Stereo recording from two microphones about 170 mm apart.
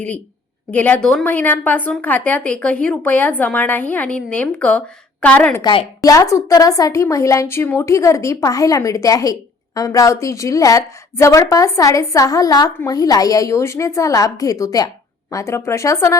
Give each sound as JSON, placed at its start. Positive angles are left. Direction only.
{"t": 0.7, "sound": "a woman's voice", "side_deg": 10}
{"t": 5.6, "sound": "a woman's voice", "side_deg": 25}